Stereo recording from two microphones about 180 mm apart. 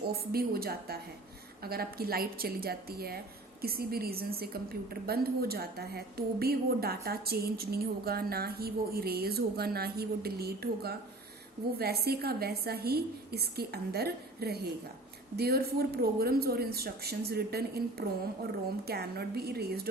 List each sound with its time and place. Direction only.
0.1 s a woman's voice: 55° right (ahead or behind)